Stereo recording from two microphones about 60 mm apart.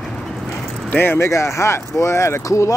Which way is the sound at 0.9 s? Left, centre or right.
Left.